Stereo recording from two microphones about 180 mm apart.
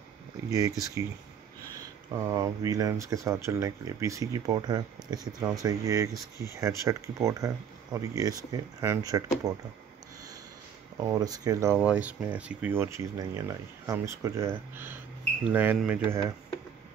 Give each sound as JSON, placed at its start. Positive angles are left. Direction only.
{"t": 0.5, "sound": "speech", "side_deg": -20}
{"t": 11.1, "sound": "speech", "side_deg": -20}